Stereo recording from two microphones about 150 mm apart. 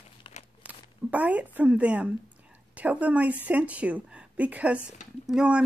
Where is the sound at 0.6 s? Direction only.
10° right (ahead or behind).